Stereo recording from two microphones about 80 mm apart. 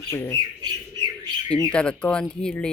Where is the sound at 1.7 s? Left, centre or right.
Centre.